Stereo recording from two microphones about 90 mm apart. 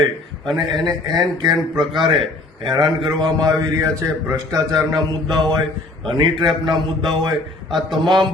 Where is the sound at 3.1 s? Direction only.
50° right (ahead or behind).